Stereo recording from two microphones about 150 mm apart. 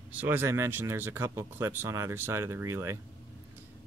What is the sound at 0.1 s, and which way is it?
Speech, 10° right (ahead or behind).